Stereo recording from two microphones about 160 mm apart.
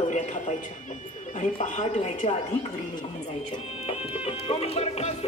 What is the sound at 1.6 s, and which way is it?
Speech, 50° left (ahead or behind).